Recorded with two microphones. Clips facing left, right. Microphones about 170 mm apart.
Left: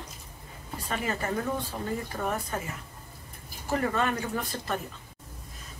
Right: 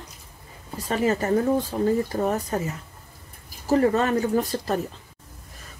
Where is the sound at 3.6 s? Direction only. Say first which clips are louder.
Right 8 dB; 35° right (ahead or behind).